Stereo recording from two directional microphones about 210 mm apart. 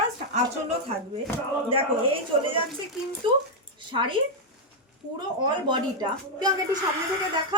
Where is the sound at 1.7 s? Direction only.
25° right (ahead or behind).